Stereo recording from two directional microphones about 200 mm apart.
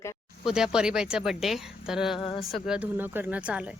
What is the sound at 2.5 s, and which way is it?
Speech, 5° right (ahead or behind).